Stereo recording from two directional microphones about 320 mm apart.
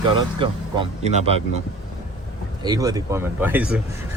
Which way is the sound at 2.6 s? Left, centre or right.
Centre.